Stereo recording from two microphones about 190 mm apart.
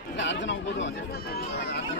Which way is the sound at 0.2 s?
75° left (ahead or behind).